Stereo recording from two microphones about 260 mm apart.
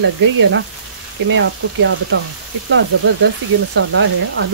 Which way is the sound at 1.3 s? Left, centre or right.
Right.